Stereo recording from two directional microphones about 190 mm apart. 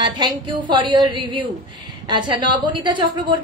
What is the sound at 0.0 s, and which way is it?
A woman's voice, 25° right (ahead or behind).